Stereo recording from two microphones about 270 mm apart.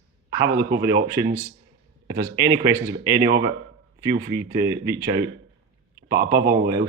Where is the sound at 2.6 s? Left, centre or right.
Centre.